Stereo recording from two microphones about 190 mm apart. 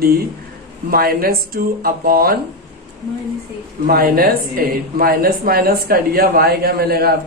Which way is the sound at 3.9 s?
50° right (ahead or behind).